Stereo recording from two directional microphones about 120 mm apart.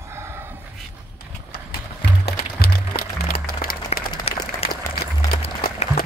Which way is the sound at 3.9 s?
60° left (ahead or behind).